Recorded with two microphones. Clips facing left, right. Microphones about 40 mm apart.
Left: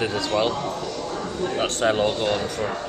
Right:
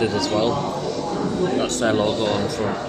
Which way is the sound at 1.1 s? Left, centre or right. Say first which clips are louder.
Right 6 dB; centre.